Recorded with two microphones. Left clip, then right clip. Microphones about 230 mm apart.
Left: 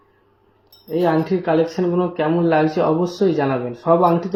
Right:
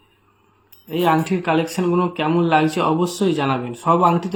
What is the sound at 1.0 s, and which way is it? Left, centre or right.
Speech, right.